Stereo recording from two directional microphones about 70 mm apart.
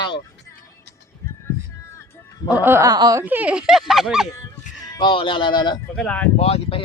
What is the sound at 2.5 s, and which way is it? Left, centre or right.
Speech, right.